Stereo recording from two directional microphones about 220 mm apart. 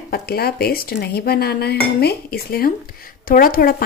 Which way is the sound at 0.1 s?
45° left (ahead or behind).